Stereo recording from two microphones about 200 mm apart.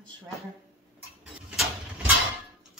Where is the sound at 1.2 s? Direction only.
5° right (ahead or behind).